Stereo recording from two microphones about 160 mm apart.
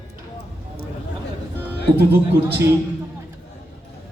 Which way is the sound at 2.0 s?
80° right.